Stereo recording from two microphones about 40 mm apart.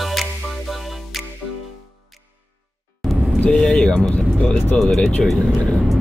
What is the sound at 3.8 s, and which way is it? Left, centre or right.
Vehicle, left.